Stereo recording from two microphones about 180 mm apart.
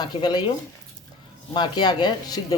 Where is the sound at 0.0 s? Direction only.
25° left (ahead or behind).